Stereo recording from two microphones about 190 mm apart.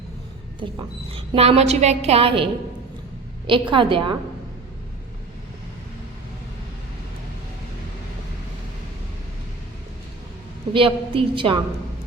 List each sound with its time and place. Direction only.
1.1 s a woman's voice: 30° right (ahead or behind)
10.7 s a woman's voice: 25° right (ahead or behind)